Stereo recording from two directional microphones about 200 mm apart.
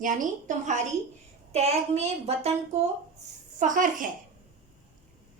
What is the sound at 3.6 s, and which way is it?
Speech, 40° right (ahead or behind).